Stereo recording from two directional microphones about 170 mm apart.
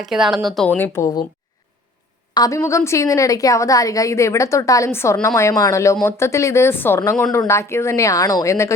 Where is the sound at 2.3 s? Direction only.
20° left (ahead or behind).